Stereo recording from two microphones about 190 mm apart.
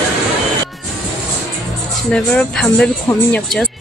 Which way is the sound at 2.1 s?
5° left (ahead or behind).